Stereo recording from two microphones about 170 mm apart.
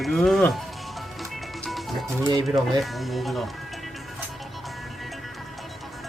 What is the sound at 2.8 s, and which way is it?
Speech, centre (ahead or behind).